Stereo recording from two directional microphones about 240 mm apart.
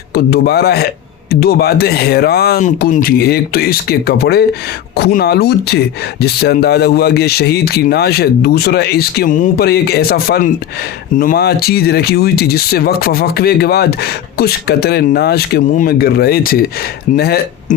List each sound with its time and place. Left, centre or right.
0.1 s speech: left